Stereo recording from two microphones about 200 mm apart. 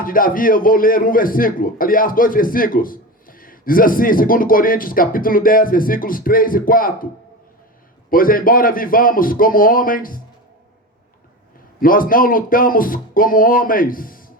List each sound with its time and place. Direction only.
0.0 s a man's voice: 45° left (ahead or behind)
8.1 s a man's voice: 45° left (ahead or behind)
11.8 s a man's voice: 45° left (ahead or behind)